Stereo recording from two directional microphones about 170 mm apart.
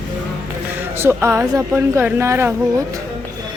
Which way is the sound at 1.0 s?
15° right (ahead or behind).